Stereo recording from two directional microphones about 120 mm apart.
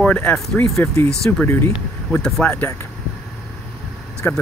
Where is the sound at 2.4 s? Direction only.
15° left (ahead or behind).